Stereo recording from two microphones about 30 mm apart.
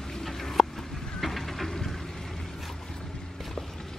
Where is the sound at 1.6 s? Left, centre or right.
Centre.